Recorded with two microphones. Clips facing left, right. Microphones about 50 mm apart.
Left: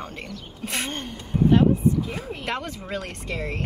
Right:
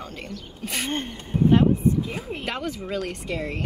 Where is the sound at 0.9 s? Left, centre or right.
Right.